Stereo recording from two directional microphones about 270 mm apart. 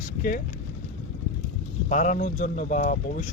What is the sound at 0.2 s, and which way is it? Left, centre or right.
Speech, left.